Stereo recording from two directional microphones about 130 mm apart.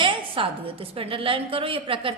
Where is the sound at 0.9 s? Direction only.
45° right (ahead or behind).